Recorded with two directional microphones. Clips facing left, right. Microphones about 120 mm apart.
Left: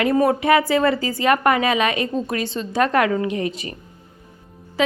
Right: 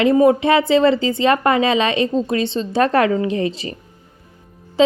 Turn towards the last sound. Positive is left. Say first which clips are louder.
# right 6 dB
turn(degrees=-25)  # may be behind; listen again after turning